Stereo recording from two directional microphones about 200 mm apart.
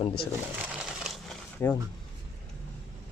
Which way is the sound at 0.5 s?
5° right (ahead or behind).